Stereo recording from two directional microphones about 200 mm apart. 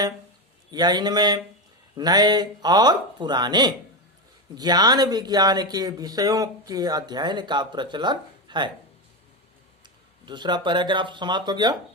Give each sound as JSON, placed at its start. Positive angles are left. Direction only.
{"t": 0.7, "sound": "speech", "side_deg": -20}
{"t": 9.8, "sound": "speech", "side_deg": -20}